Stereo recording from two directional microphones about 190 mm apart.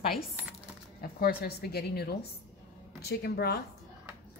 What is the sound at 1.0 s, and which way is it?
A woman's voice, 55° left (ahead or behind).